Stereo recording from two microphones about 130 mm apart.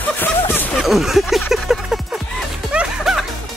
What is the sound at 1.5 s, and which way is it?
Music, centre (ahead or behind).